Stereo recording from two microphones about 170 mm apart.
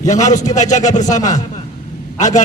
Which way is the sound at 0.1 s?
45° left (ahead or behind).